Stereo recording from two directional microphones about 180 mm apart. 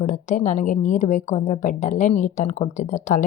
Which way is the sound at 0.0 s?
45° left (ahead or behind).